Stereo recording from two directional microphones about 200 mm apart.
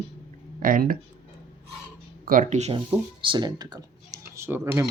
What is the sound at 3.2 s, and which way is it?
Speech, 20° right (ahead or behind).